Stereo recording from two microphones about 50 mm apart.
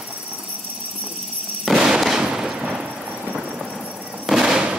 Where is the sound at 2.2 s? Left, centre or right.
Right.